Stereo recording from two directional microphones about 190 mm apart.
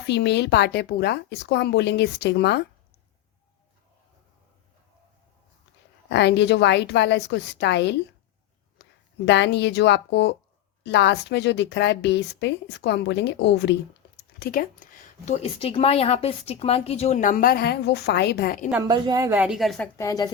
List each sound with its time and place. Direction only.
0.1 s a woman's voice: 65° left (ahead or behind)
6.1 s a woman's voice: 65° left (ahead or behind)
14.3 s speech: 50° left (ahead or behind)
15.2 s speech: 35° left (ahead or behind)
18.9 s a woman's voice: 20° right (ahead or behind); by 19.9 s centre (ahead or behind)
20.0 s speech: 20° left (ahead or behind)